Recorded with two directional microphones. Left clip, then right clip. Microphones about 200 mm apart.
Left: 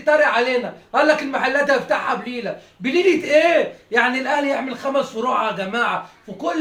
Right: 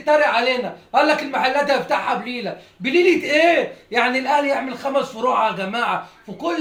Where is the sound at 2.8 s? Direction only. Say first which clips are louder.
Right 1 dB; 15° left (ahead or behind).